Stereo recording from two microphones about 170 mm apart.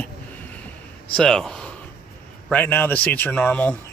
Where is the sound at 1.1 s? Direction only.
5° left (ahead or behind).